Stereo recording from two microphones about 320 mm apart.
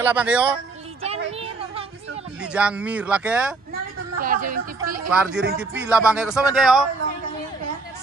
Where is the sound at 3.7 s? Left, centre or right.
Right.